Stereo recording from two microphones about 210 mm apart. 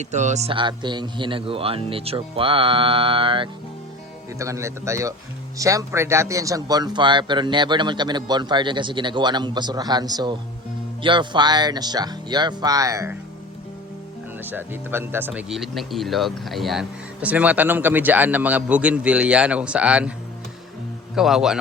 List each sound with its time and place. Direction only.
0.0 s a man's voice: 35° right (ahead or behind)
4.4 s a man's voice: 15° right (ahead or behind)
14.4 s speech: 10° right (ahead or behind)
21.2 s speech: centre (ahead or behind)